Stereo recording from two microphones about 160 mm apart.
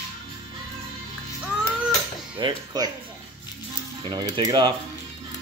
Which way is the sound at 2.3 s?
25° right (ahead or behind).